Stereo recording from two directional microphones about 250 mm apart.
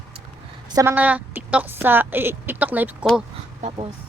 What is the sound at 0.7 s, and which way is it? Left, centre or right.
A woman's voice, centre.